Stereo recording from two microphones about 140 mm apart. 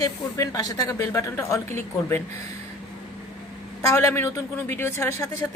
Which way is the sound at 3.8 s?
20° left (ahead or behind).